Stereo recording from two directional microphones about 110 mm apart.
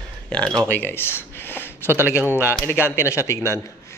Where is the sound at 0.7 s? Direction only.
20° left (ahead or behind).